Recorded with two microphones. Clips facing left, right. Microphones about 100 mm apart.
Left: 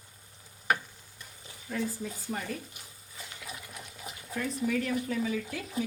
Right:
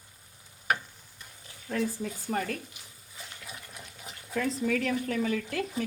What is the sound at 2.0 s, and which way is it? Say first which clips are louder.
Speech: right 4 dB; 60° right (ahead or behind).